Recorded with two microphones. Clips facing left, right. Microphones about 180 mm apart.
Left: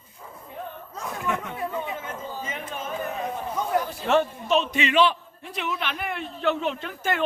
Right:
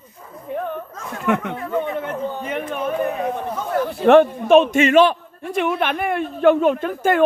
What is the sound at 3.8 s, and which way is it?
A man's voice, 60° right (ahead or behind).